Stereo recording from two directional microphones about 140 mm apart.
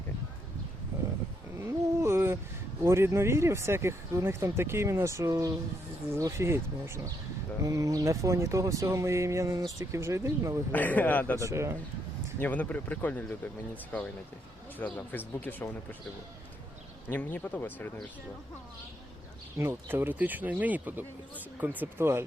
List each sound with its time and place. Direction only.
1.6 s a sound: 20° right (ahead or behind)
2.8 s speech: 20° right (ahead or behind)
10.7 s speech: 10° left (ahead or behind)
11.3 s speech: 20° right (ahead or behind)
12.4 s speech: 10° left (ahead or behind)
14.8 s speech: 10° left (ahead or behind)
17.1 s speech: 10° left (ahead or behind)
19.5 s speech: 15° right (ahead or behind)